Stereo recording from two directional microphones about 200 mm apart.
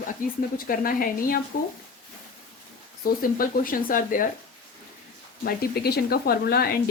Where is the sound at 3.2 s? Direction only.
45° left (ahead or behind).